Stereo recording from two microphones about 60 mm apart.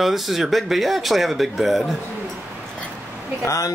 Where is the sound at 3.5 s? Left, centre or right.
Left.